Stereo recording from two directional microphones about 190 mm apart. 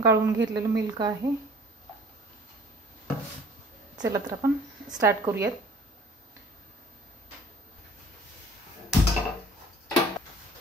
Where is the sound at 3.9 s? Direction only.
15° right (ahead or behind).